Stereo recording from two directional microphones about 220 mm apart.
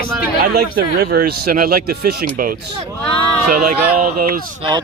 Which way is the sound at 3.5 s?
40° right (ahead or behind).